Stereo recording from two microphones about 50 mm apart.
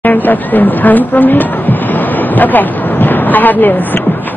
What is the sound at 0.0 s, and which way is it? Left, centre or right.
A woman's voice, left.